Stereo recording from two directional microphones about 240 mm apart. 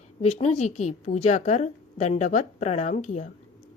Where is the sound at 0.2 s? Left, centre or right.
Left.